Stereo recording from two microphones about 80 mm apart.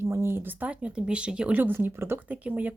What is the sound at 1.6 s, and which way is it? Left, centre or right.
Speech, right.